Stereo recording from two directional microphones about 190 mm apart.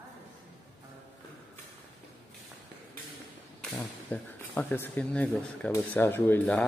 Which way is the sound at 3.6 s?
5° left (ahead or behind).